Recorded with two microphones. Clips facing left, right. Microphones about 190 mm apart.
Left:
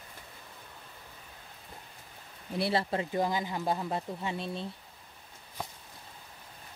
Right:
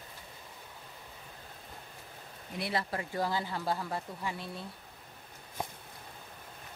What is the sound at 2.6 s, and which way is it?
Speech, 30° left (ahead or behind).